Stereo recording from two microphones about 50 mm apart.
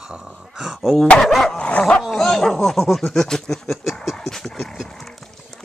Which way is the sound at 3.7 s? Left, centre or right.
Centre.